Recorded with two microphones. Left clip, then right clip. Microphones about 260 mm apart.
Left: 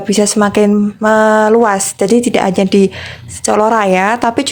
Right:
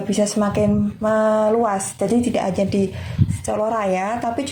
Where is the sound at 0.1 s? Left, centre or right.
Left.